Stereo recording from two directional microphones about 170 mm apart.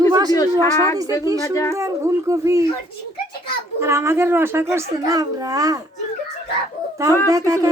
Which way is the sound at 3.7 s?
15° right (ahead or behind).